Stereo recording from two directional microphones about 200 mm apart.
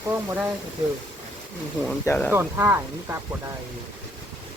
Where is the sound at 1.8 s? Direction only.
5° left (ahead or behind).